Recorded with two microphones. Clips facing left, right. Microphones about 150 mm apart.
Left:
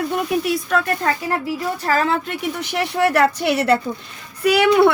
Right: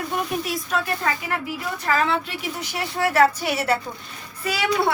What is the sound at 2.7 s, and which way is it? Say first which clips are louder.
Speech: left 2 dB; 70° left (ahead or behind).